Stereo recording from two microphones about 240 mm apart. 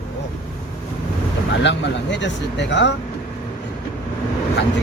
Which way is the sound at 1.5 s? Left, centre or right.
Left.